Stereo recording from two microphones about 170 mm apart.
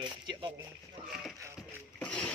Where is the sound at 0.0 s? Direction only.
25° right (ahead or behind).